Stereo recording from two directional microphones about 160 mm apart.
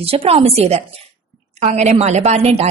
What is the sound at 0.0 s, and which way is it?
A woman's voice, 35° right (ahead or behind).